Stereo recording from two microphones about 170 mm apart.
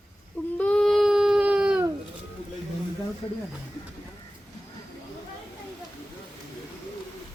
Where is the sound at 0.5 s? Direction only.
5° left (ahead or behind).